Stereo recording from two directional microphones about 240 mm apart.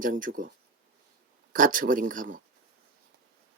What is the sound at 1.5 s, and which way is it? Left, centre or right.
Speech, right.